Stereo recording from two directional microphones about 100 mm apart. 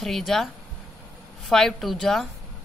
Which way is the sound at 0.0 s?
Centre (ahead or behind).